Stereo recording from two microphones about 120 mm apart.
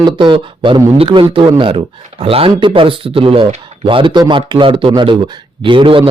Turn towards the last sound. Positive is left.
turn(degrees=-45)  # may be behind; listen again after turning